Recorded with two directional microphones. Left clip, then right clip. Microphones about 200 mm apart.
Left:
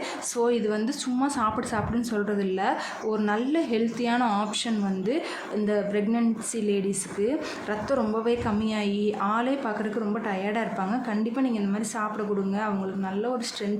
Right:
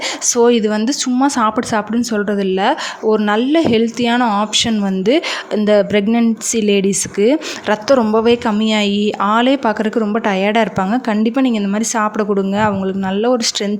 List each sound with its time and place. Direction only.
0.3 s speech: 45° right (ahead or behind)